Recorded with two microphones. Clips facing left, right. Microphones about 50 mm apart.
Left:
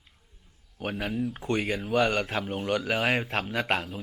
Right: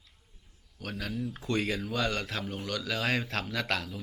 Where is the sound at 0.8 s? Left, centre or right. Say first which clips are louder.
Left 5 dB; left.